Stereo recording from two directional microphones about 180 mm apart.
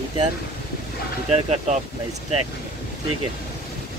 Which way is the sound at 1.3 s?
40° right (ahead or behind).